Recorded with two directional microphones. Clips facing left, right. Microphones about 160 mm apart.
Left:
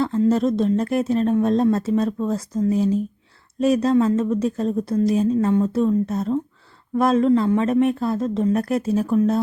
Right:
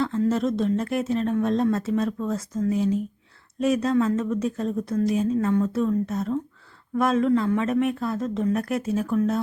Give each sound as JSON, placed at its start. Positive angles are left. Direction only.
{"t": 0.3, "sound": "speech", "side_deg": 35}